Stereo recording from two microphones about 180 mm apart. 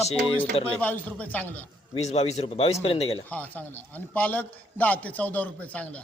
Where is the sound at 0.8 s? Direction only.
10° left (ahead or behind).